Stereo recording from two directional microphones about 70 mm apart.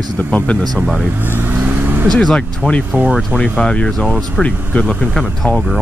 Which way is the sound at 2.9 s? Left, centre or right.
Right.